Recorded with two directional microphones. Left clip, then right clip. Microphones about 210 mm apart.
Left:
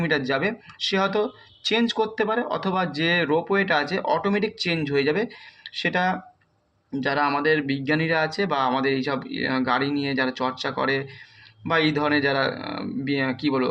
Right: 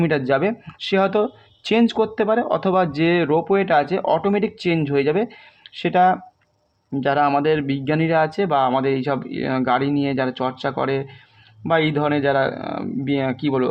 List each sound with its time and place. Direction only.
0.3 s speech: 45° right (ahead or behind)